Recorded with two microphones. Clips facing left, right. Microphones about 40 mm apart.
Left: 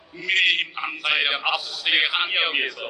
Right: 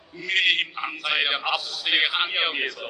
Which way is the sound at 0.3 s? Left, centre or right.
Centre.